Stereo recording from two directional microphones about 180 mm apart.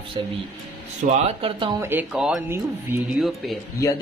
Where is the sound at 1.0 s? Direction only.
40° right (ahead or behind).